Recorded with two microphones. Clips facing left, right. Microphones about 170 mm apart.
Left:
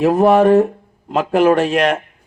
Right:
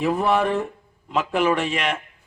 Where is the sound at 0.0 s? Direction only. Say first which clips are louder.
Left 9 dB; 40° left (ahead or behind).